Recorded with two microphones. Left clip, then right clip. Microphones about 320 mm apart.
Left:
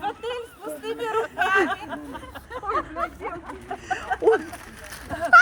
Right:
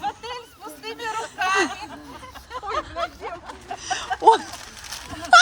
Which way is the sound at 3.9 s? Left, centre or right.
Centre.